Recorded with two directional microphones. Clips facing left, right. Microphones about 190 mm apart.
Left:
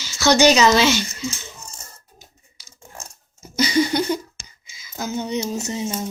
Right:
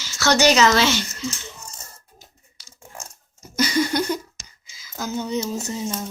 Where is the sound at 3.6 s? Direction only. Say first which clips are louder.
Left 2 dB; 10° left (ahead or behind).